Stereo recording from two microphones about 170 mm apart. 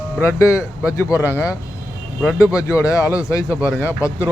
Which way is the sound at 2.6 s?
20° left (ahead or behind).